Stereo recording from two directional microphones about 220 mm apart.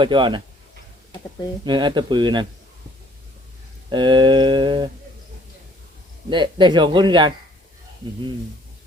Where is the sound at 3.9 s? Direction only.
20° right (ahead or behind).